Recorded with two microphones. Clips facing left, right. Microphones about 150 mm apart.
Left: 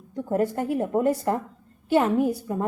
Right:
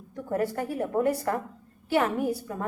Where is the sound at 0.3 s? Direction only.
20° left (ahead or behind).